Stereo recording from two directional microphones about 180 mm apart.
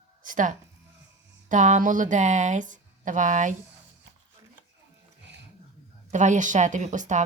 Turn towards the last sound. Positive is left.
turn(degrees=-45)  # may be behind; listen again after turning